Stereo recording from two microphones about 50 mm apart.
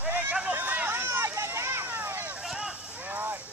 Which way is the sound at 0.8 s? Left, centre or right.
Right.